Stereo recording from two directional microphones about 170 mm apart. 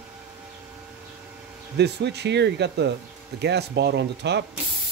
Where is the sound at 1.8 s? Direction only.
85° right.